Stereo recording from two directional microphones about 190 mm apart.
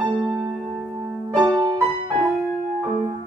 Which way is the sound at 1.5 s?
20° right (ahead or behind).